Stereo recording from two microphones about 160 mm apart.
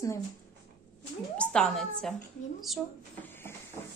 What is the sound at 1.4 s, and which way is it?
Speech, 5° left (ahead or behind).